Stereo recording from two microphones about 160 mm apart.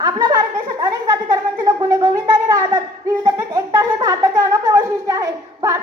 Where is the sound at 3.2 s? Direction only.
25° right (ahead or behind).